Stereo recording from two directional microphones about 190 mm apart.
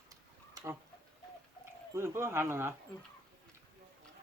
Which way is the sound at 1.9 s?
15° right (ahead or behind).